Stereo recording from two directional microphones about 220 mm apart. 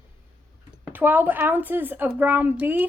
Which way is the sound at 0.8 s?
10° right (ahead or behind).